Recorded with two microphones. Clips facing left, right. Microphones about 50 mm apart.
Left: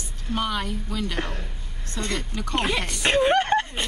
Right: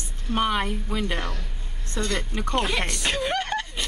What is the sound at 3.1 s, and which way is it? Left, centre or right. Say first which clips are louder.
Chuckle: left 9 dB; left.